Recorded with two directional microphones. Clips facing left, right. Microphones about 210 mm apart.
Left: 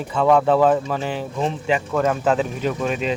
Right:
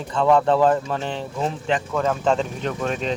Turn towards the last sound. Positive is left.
turn(degrees=5)  # may be behind; listen again after turning